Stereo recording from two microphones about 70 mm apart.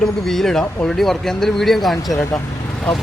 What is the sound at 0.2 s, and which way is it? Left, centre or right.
Speech, centre.